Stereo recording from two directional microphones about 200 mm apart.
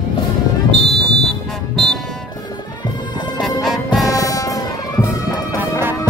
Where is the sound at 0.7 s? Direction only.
55° right (ahead or behind).